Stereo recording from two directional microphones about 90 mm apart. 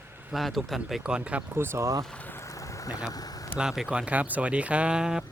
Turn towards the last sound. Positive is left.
turn(degrees=-5)  # may be behind; listen again after turning